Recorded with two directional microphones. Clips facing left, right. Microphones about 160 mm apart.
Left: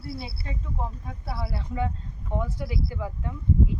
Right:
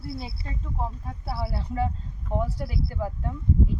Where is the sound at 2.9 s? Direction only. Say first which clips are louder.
Right 2 dB; 35° right (ahead or behind).